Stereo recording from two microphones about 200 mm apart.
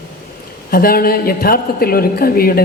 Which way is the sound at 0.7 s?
50° left (ahead or behind).